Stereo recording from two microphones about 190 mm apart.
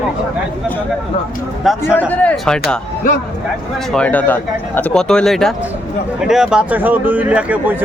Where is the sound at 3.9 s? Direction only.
5° left (ahead or behind).